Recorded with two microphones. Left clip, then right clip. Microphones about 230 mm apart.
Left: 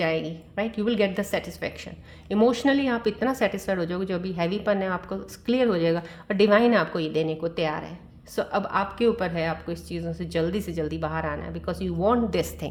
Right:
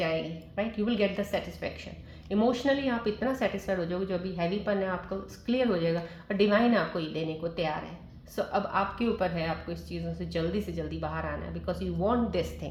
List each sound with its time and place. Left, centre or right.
0.0 s speech: left